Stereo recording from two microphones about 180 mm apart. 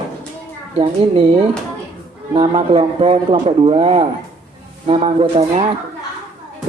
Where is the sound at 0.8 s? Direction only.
35° right (ahead or behind).